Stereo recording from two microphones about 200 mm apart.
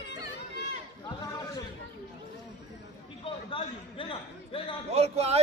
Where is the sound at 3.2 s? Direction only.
25° left (ahead or behind).